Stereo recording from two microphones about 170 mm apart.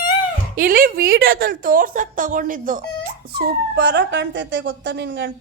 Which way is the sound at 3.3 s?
80° right.